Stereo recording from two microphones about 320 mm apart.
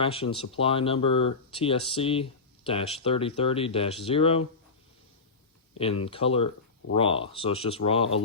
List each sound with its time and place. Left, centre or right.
0.0 s speech: centre
5.7 s speech: centre